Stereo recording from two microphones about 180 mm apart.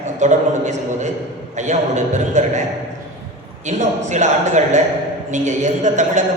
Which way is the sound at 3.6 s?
40° right (ahead or behind).